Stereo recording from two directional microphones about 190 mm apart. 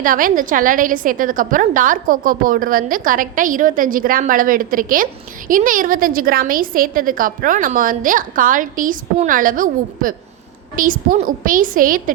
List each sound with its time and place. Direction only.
0.0 s a woman's voice: 45° right (ahead or behind)